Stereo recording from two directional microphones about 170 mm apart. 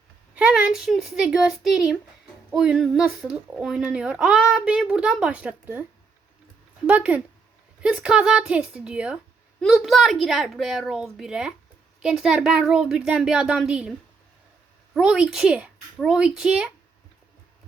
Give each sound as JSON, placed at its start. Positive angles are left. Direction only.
{"t": 0.3, "sound": "a woman's voice", "side_deg": -5}
{"t": 6.8, "sound": "a woman's voice", "side_deg": -10}
{"t": 14.9, "sound": "a woman's voice", "side_deg": -5}